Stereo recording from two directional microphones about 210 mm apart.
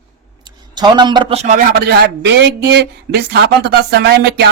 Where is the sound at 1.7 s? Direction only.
50° right (ahead or behind).